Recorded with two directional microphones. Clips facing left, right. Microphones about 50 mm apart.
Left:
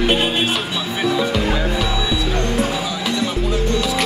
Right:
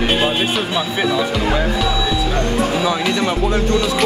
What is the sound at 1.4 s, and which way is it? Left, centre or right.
Speech, centre.